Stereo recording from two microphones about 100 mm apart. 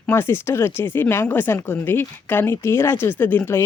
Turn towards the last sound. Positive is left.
turn(degrees=25)  # may be behind; listen again after turning